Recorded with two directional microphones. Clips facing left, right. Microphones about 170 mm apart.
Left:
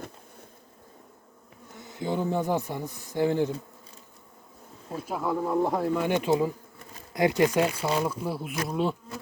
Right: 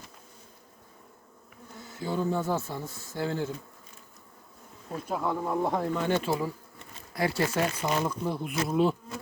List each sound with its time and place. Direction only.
1.7 s speech: 20° left (ahead or behind)
5.0 s speech: 5° left (ahead or behind)
8.6 s bee: centre (ahead or behind)